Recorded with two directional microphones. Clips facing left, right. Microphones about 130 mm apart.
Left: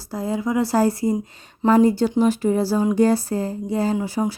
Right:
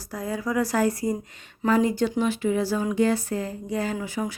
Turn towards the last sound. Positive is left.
turn(degrees=30)  # may be behind; listen again after turning